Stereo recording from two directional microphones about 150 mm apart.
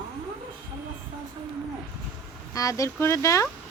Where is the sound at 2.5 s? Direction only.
20° left (ahead or behind).